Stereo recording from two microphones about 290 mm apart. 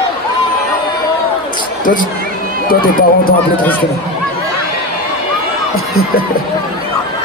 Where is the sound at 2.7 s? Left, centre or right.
Left.